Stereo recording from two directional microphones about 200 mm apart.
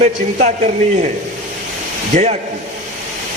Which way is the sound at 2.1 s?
35° right (ahead or behind).